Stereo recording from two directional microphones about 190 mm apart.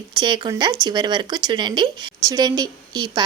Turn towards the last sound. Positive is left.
turn(degrees=-20)  # may be behind; listen again after turning